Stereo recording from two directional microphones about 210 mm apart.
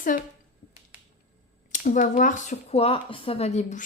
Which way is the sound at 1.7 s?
40° left (ahead or behind).